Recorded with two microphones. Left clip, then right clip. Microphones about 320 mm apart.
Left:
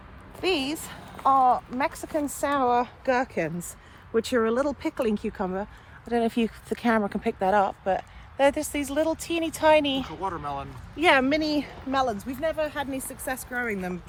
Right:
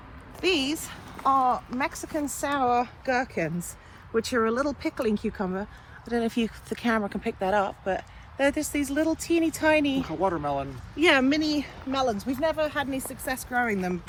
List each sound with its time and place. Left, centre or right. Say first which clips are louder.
0.4 s speech: right 1 dB; left
11.9 s speech: left 1 dB; centre
12.3 s speech: right 2 dB; centre
13.5 s speech: right 6 dB; centre